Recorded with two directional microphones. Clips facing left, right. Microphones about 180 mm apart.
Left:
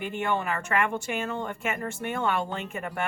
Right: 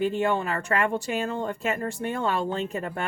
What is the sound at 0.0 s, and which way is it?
Speech, 35° right (ahead or behind).